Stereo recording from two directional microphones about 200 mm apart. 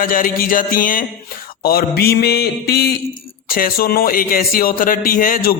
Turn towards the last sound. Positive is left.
turn(degrees=45)  # may be behind; listen again after turning